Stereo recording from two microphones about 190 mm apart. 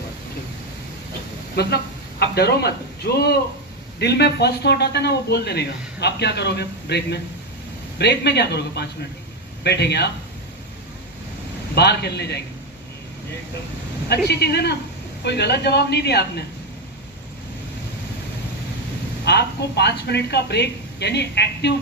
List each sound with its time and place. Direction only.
1.5 s speech: 60° left (ahead or behind)
11.7 s speech: 60° left (ahead or behind)
14.3 s speech: 60° left (ahead or behind)
19.2 s speech: 60° left (ahead or behind)